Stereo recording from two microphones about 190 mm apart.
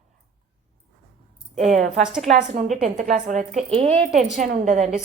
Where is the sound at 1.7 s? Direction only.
40° right (ahead or behind).